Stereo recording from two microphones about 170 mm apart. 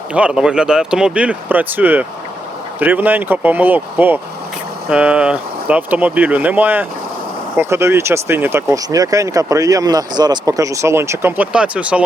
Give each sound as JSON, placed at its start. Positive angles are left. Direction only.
{"t": 0.1, "sound": "speech", "side_deg": -5}